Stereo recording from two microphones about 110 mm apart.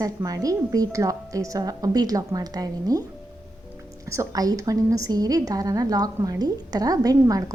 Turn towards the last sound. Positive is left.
turn(degrees=-35)  # may be behind; listen again after turning